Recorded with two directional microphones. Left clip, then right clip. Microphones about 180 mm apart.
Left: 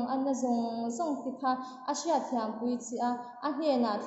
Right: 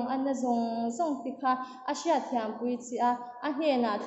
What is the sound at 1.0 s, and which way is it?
A woman's voice, 5° left (ahead or behind).